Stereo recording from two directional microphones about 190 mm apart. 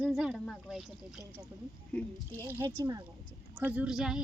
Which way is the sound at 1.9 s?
5° left (ahead or behind).